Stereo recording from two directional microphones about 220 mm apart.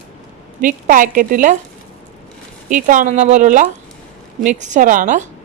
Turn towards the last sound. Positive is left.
turn(degrees=-35)  # may be behind; listen again after turning